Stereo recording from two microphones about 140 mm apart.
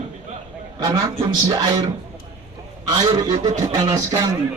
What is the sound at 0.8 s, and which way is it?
Speech, 25° right (ahead or behind).